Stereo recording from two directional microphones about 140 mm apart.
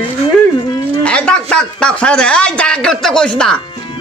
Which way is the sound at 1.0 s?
5° left (ahead or behind).